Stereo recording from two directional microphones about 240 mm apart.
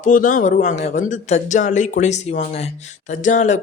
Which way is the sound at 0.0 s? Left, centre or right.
Left.